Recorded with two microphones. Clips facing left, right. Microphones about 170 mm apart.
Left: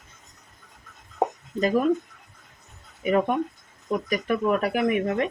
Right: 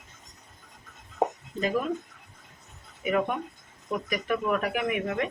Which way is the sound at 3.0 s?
35° left (ahead or behind).